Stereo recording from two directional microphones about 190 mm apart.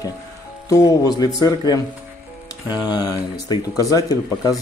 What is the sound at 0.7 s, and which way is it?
Speech, 20° left (ahead or behind).